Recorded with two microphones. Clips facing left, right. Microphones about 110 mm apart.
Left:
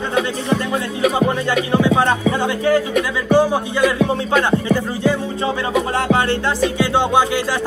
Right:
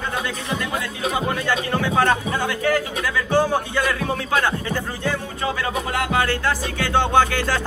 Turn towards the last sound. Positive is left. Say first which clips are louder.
# left 2 dB
turn(degrees=15)  # may be behind; listen again after turning